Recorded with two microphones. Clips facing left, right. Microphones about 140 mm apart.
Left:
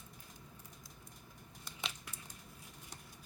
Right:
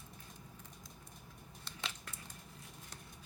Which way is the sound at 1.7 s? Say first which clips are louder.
Even; 15° left (ahead or behind).